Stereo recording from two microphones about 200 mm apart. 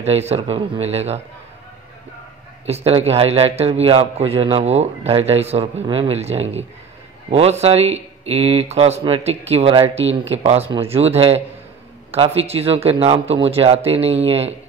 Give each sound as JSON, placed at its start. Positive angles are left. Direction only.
{"t": 0.0, "sound": "a man's voice", "side_deg": -30}
{"t": 2.6, "sound": "a man's voice", "side_deg": -30}